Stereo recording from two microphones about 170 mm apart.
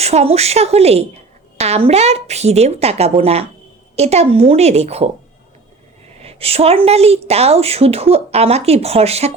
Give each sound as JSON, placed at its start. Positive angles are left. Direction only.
{"t": 0.0, "sound": "a woman's voice", "side_deg": -40}
{"t": 6.1, "sound": "a woman's voice", "side_deg": -35}